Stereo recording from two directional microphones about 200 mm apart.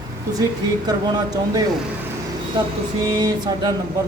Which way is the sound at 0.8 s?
20° right (ahead or behind).